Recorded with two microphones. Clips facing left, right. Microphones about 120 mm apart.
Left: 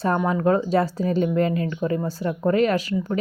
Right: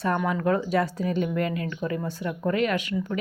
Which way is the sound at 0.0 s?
30° left (ahead or behind).